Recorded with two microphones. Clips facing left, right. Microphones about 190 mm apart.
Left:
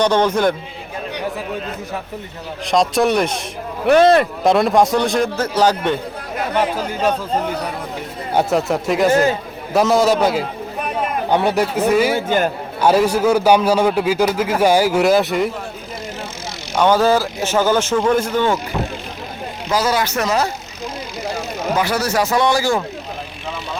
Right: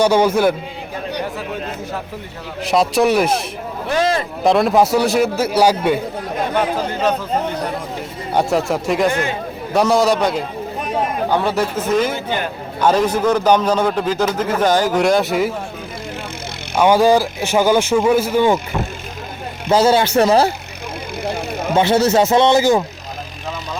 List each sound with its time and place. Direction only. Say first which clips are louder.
0.0 s speech: right 2 dB; 10° right (ahead or behind)
2.6 s a man's voice: right 1 dB; 5° right (ahead or behind)
3.8 s speech: left 7 dB; 65° left (ahead or behind)
4.4 s a man's voice: right 3 dB; centre (ahead or behind)
6.4 s a man's voice: even; 5° left (ahead or behind)
8.4 s a man's voice: even; centre (ahead or behind)
11.3 s a man's voice: left 4 dB; 15° left (ahead or behind); by 15.5 s centre (ahead or behind)
16.7 s speech: right 2 dB; 10° right (ahead or behind)
19.7 s speech: right 6 dB; 25° right (ahead or behind)
21.8 s speech: right 6 dB; 25° right (ahead or behind)